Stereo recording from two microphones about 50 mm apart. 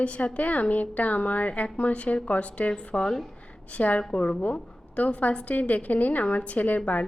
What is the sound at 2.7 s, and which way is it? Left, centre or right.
Speech, centre.